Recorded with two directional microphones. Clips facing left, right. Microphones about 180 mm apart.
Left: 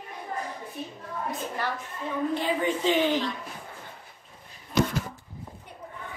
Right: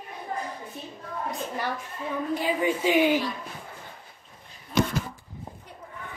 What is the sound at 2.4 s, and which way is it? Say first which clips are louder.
Speech: right 1 dB; 10° right (ahead or behind).